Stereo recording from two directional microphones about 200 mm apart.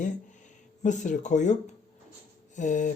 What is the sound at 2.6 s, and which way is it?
Speech, 40° left (ahead or behind).